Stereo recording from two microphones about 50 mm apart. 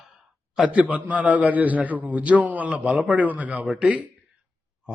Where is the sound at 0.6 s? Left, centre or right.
Centre.